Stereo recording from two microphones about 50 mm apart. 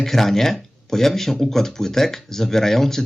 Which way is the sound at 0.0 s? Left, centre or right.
Centre.